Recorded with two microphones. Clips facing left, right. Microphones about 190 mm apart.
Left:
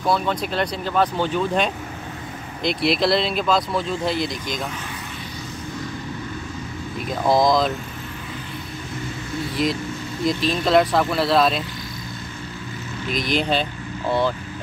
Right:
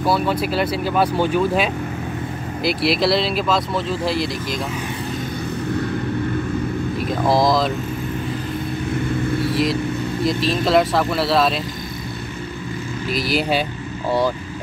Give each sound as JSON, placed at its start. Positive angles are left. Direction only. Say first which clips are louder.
{"t": 0.0, "sound": "speech", "louder": "right 3 dB", "side_deg": -5}
{"t": 7.1, "sound": "speech", "louder": "even", "side_deg": 0}
{"t": 9.5, "sound": "speech", "louder": "right 4 dB", "side_deg": 0}
{"t": 13.1, "sound": "speech", "louder": "right 1 dB", "side_deg": -5}